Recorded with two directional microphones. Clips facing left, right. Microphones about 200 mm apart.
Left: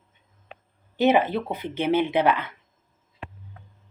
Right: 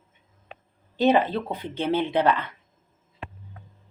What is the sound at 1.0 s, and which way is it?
Speech, 10° left (ahead or behind).